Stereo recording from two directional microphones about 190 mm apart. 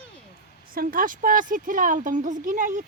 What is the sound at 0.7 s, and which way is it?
Speech, 50° right (ahead or behind).